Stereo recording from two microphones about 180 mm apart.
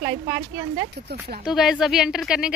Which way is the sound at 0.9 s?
65° right (ahead or behind).